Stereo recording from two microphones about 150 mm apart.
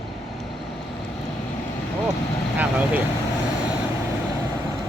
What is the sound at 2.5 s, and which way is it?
Speech, 10° right (ahead or behind).